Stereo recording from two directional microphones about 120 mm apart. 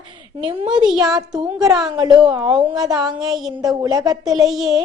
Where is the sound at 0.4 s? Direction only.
40° right (ahead or behind).